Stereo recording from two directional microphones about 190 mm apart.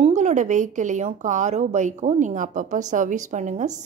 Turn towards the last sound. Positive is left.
turn(degrees=-40)  # may be behind; listen again after turning